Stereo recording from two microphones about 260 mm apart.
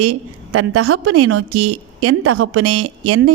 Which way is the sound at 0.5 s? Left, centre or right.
Right.